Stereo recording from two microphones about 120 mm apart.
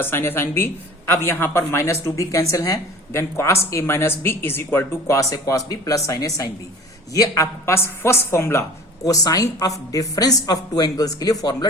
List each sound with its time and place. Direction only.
0.0 s a man's voice: 20° left (ahead or behind)